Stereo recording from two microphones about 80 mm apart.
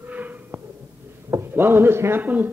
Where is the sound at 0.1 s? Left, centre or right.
Centre.